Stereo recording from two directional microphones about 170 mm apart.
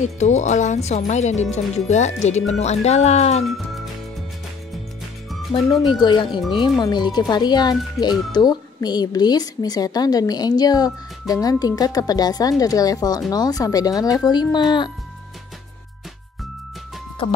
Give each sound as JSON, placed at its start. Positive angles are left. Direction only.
{"t": 0.2, "sound": "speech", "side_deg": 45}
{"t": 3.4, "sound": "music", "side_deg": 0}
{"t": 5.5, "sound": "speech", "side_deg": 25}